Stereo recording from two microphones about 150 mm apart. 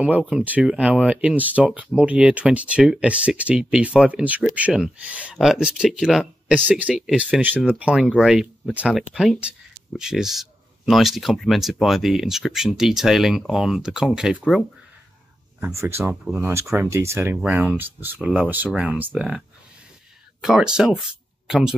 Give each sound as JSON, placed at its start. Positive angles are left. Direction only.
{"t": 0.0, "sound": "speech", "side_deg": -5}
{"t": 15.6, "sound": "speech", "side_deg": -20}
{"t": 20.4, "sound": "speech", "side_deg": -5}